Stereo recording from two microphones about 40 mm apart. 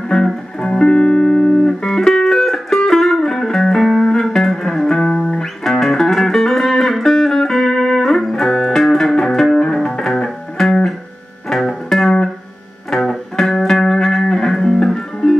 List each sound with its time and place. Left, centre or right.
0.1 s music: centre